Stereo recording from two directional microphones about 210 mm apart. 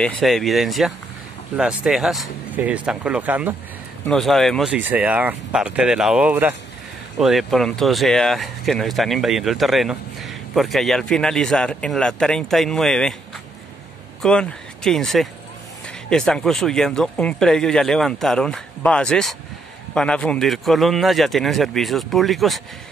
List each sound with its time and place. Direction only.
0.0 s speech: centre (ahead or behind)
14.2 s speech: 5° left (ahead or behind)